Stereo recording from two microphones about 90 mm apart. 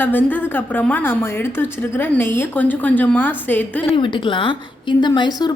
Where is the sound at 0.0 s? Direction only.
20° left (ahead or behind).